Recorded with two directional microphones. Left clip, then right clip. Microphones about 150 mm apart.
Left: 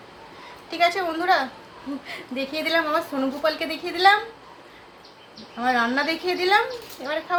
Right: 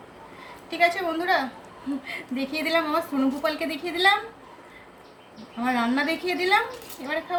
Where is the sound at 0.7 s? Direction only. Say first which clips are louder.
Left 1 dB; 10° left (ahead or behind).